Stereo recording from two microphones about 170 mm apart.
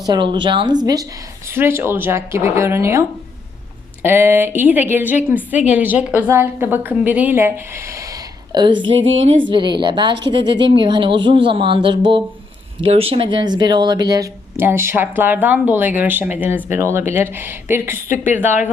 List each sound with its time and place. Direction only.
0.0 s speech: 25° right (ahead or behind)
1.5 s a woman's voice: 15° right (ahead or behind)